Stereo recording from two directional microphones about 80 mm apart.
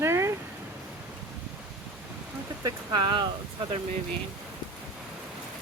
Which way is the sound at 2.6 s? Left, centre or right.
Right.